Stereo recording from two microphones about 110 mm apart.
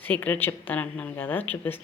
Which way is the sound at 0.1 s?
15° left (ahead or behind).